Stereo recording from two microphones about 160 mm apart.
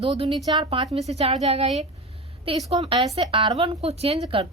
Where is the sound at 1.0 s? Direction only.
40° right (ahead or behind).